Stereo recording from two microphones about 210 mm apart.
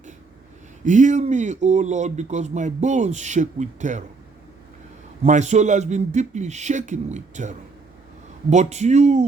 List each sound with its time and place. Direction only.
0.9 s speech: 35° right (ahead or behind)
5.2 s speech: 35° right (ahead or behind)